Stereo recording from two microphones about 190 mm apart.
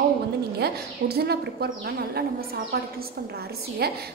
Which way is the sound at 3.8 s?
55° right (ahead or behind).